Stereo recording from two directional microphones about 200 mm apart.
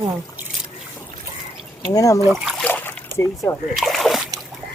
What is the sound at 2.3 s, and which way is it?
Trickle, centre (ahead or behind).